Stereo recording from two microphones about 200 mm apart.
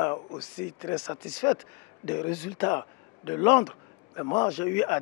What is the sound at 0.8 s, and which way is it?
A man's voice, 20° left (ahead or behind).